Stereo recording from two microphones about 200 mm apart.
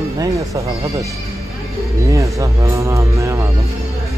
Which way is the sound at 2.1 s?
15° right (ahead or behind).